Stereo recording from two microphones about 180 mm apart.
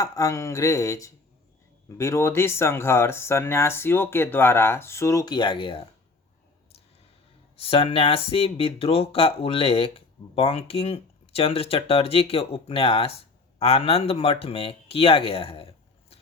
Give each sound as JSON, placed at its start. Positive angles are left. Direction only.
{"t": 0.0, "sound": "speech", "side_deg": 20}
{"t": 7.5, "sound": "speech", "side_deg": 30}